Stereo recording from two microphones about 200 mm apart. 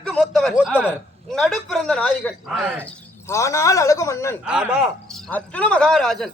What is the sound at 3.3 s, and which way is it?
A man's voice, 15° left (ahead or behind).